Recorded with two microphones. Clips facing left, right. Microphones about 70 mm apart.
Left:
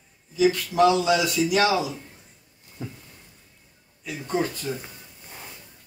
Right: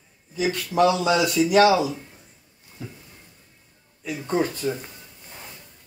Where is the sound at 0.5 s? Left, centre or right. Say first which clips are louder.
Even; right.